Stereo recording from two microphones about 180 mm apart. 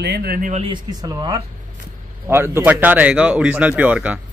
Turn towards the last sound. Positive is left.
turn(degrees=-10)  # may be behind; listen again after turning